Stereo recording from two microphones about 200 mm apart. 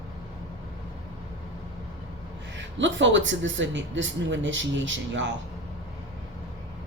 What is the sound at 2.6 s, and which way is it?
Speech, 65° right (ahead or behind).